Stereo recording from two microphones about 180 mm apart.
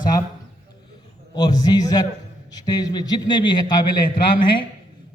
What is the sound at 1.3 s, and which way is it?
A man's voice, 20° left (ahead or behind).